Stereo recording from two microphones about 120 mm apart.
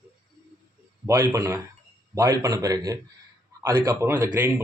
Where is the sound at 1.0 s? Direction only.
30° right (ahead or behind).